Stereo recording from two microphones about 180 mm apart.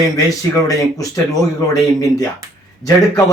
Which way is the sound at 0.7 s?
20° left (ahead or behind).